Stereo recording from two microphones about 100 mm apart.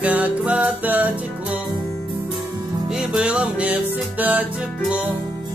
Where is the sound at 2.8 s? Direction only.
10° right (ahead or behind).